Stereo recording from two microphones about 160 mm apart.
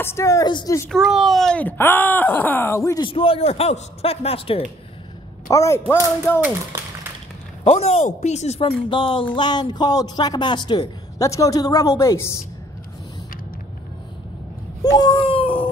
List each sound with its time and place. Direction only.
0.0 s a man's voice: 15° left (ahead or behind)
0.8 s speech: centre (ahead or behind); by 3.1 s 20° left (ahead or behind)
3.1 s speech: 35° left (ahead or behind)
5.5 s a man's voice: 20° left (ahead or behind)
7.6 s a man's voice: 40° left (ahead or behind); by 12.4 s 15° left (ahead or behind)
14.8 s speech: 25° left (ahead or behind)